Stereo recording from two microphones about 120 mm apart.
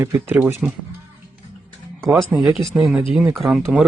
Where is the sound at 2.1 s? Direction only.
5° right (ahead or behind).